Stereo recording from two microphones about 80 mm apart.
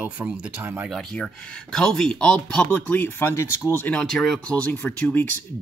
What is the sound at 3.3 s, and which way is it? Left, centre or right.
Speech, left.